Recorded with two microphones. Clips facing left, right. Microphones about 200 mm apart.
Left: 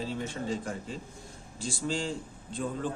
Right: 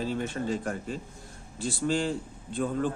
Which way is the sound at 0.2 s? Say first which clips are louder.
Right 3 dB; 60° right (ahead or behind).